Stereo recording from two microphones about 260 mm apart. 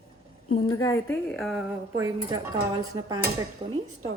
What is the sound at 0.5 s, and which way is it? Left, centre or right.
A woman's voice, centre.